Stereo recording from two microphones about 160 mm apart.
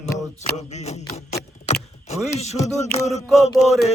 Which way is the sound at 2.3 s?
45° left (ahead or behind).